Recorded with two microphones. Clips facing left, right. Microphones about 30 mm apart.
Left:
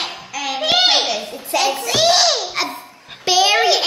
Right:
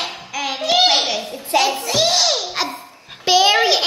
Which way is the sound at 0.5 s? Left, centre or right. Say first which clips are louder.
Even; left.